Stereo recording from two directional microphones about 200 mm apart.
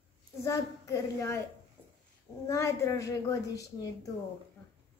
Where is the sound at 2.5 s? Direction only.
15° left (ahead or behind).